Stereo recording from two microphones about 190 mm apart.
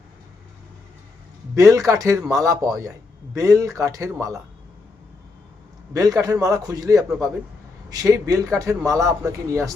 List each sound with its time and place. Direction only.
1.5 s speech: 15° right (ahead or behind)
5.9 s speech: 20° right (ahead or behind)